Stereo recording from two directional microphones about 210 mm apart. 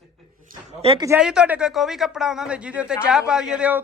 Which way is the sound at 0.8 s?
25° right (ahead or behind).